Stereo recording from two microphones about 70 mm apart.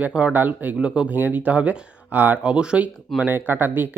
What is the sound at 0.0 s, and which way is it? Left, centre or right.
Speech, centre.